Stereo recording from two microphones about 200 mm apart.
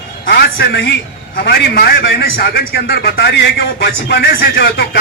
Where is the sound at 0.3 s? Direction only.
55° left (ahead or behind).